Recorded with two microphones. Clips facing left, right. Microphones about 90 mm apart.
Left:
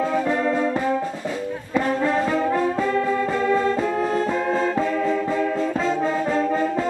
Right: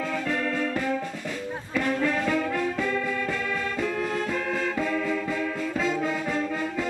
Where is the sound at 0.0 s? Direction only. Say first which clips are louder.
Left 7 dB; 25° left (ahead or behind).